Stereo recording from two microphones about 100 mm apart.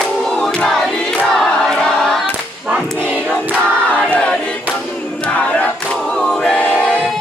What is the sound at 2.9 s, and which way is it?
Crowd, 15° right (ahead or behind).